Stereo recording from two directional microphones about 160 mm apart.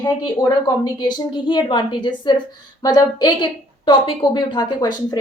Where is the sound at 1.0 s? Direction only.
25° left (ahead or behind).